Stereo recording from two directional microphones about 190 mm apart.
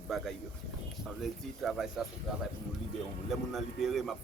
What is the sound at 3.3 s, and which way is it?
Speech, centre (ahead or behind).